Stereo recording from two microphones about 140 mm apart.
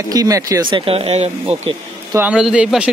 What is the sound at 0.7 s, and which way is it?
Speech, 45° right (ahead or behind).